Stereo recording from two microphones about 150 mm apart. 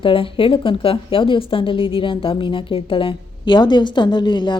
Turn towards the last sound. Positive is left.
turn(degrees=30)  # may be behind; listen again after turning